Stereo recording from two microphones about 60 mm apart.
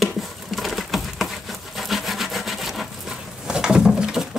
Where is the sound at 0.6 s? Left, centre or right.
Centre.